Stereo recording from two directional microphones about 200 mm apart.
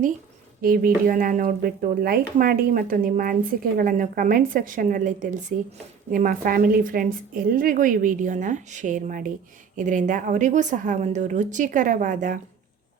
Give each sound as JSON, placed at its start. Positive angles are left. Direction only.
{"t": 0.6, "sound": "a woman's voice", "side_deg": -45}